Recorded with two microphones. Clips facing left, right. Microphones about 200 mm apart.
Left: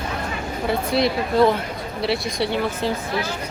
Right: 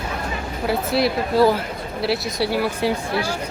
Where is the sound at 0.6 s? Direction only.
5° right (ahead or behind).